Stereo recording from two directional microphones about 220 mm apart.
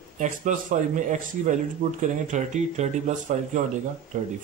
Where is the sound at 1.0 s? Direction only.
35° right (ahead or behind).